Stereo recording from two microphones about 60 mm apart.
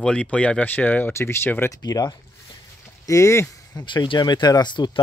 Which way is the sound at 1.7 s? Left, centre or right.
Left.